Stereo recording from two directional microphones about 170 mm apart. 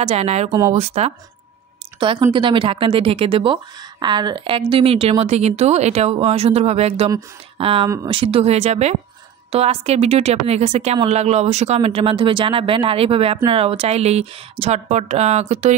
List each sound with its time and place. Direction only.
0.0 s a woman's voice: 40° right (ahead or behind)
0.5 s speech: 20° right (ahead or behind)
0.7 s a woman's voice: 40° right (ahead or behind)